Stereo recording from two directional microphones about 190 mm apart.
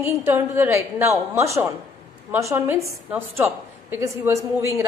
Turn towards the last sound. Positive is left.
turn(degrees=-15)  # may be behind; listen again after turning